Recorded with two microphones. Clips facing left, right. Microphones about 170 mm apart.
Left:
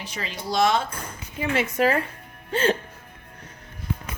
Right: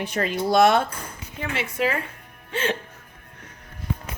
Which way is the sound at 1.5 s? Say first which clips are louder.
Left 4 dB; 40° left (ahead or behind).